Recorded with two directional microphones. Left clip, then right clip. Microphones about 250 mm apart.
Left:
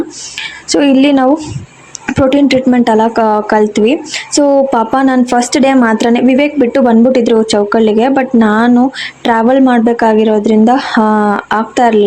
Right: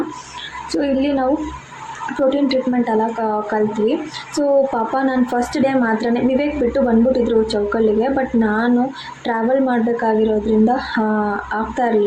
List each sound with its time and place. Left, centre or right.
0.7 s a woman's voice: left
2.5 s a woman's voice: left